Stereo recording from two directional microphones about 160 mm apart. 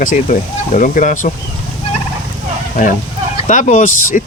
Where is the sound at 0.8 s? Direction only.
55° left (ahead or behind).